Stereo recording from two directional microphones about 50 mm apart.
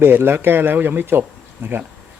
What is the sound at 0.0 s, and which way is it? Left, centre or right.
Speech, right.